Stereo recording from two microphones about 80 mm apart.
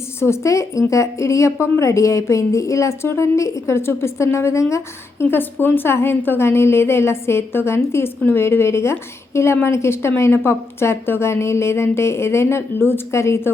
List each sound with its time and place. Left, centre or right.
0.2 s a woman's voice: left
5.3 s a woman's voice: left